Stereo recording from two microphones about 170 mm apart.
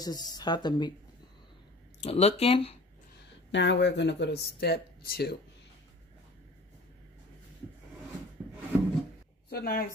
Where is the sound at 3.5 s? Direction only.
90° left; by 5.3 s 65° left (ahead or behind).